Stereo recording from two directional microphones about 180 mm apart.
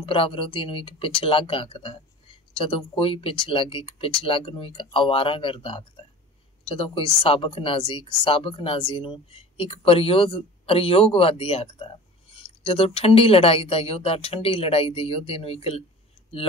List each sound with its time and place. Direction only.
0.0 s speech: 30° left (ahead or behind)